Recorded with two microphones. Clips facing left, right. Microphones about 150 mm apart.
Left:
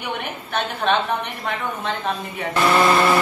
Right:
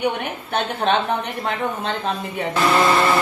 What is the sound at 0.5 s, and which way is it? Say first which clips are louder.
A woman's voice: right 1 dB; 30° right (ahead or behind).